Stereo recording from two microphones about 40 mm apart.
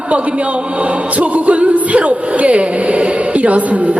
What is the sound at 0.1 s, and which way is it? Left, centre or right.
A man's voice, right.